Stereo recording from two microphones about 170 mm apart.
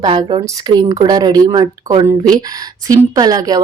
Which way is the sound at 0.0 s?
30° right (ahead or behind).